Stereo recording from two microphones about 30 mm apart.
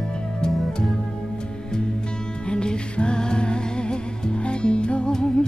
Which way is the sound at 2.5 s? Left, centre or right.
Left.